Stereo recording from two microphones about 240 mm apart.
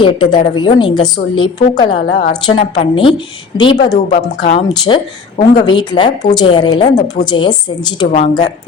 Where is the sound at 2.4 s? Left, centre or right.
Left.